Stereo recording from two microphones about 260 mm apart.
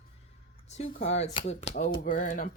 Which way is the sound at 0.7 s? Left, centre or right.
Left.